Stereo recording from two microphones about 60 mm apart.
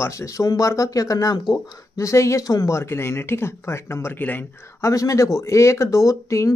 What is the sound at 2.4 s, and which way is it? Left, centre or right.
Speech, left.